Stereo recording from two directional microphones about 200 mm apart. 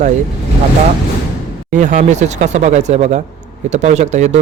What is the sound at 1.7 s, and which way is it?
A man's voice, 40° right (ahead or behind).